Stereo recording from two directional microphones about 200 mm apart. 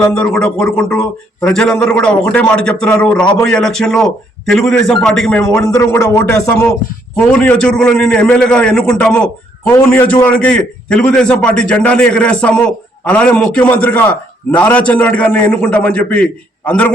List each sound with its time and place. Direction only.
0.0 s speech: 5° left (ahead or behind)
5.6 s a man's voice: 15° left (ahead or behind)